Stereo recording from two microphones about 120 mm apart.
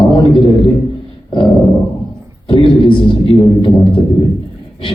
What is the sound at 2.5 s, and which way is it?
A man's voice, 45° left (ahead or behind).